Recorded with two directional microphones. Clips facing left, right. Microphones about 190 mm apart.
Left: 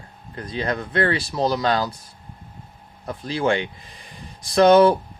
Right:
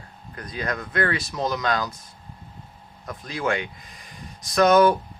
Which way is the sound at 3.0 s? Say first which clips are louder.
Left 5 dB; 30° left (ahead or behind).